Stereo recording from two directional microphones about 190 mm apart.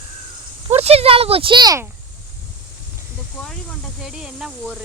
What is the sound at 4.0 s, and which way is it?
Speech, 5° right (ahead or behind).